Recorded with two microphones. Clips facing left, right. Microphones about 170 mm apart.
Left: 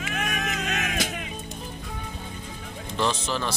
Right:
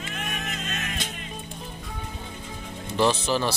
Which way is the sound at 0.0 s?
75° left (ahead or behind).